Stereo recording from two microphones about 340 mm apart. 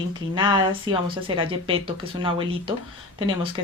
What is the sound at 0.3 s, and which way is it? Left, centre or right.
Speech, centre.